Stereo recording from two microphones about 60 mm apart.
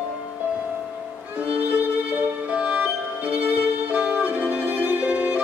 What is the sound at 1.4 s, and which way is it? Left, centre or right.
Music, right.